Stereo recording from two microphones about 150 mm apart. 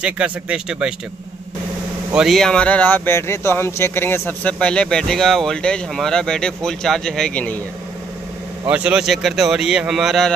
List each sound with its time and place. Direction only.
0.0 s a man's voice: 5° right (ahead or behind)
2.1 s speech: centre (ahead or behind)
8.6 s a man's voice: 10° right (ahead or behind)